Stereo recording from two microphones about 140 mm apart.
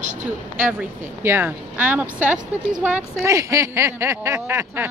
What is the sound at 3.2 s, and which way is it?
Speech, 20° right (ahead or behind).